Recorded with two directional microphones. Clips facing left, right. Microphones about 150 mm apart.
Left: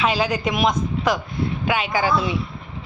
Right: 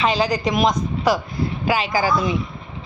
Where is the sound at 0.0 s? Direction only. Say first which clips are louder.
Right 1 dB; 5° left (ahead or behind).